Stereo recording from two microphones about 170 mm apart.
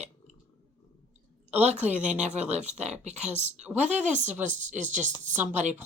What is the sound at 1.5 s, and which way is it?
A woman's voice, 40° right (ahead or behind).